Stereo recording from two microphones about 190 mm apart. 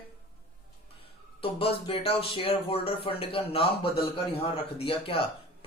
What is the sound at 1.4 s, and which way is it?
Speech, 30° left (ahead or behind).